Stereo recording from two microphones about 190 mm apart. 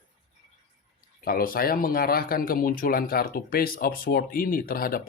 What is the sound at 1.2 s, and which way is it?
Speech, 50° left (ahead or behind).